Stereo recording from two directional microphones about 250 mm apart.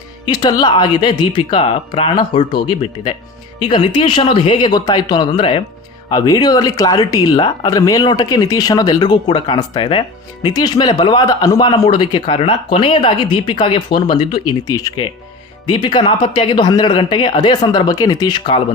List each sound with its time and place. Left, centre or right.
0.3 s speech: centre